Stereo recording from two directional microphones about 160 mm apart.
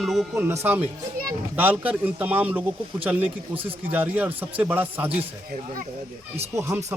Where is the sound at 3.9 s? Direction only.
10° right (ahead or behind).